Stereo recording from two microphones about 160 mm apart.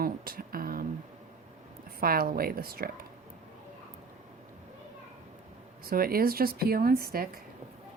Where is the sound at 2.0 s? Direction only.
65° right (ahead or behind).